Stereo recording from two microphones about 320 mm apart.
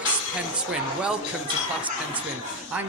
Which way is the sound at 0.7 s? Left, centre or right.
Centre.